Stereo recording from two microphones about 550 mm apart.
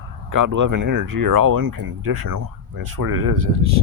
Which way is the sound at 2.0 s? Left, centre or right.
Right.